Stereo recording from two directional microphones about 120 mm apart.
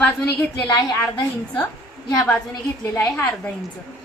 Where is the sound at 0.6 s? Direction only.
35° left (ahead or behind).